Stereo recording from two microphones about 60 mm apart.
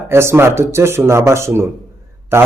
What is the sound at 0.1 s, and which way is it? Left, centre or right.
A man's voice, right.